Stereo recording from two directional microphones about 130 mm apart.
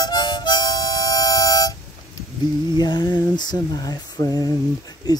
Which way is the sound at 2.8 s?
35° left (ahead or behind).